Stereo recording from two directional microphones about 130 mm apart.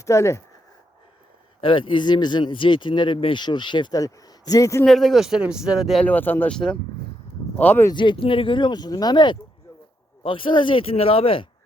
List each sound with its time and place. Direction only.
0.0 s speech: 25° left (ahead or behind)
1.6 s speech: 40° left (ahead or behind); by 4.9 s 25° left (ahead or behind)
4.9 s speech: centre (ahead or behind)
6.1 s speech: 15° left (ahead or behind)
7.9 s speech: 40° left (ahead or behind)